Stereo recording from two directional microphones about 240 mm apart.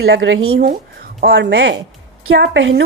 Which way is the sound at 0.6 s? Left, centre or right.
Right.